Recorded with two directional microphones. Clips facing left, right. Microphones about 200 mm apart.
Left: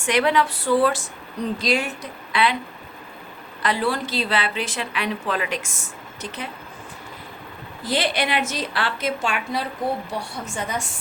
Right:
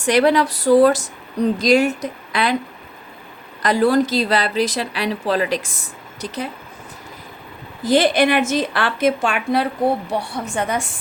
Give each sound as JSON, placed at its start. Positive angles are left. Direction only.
{"t": 0.0, "sound": "a woman's voice", "side_deg": -40}
{"t": 3.6, "sound": "a woman's voice", "side_deg": -40}
{"t": 7.9, "sound": "a woman's voice", "side_deg": -45}